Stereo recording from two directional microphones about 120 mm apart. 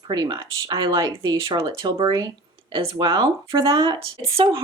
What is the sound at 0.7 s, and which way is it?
Speech, 45° right (ahead or behind).